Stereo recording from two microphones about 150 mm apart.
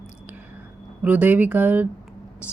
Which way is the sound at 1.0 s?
10° right (ahead or behind).